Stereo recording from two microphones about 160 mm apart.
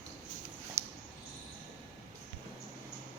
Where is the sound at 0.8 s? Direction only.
15° right (ahead or behind).